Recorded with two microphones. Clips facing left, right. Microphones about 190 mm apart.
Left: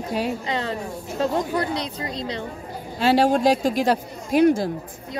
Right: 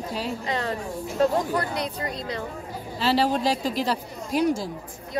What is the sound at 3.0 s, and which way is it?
Speech, 50° left (ahead or behind).